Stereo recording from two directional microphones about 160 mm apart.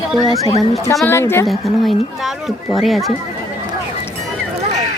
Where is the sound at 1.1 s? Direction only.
15° left (ahead or behind).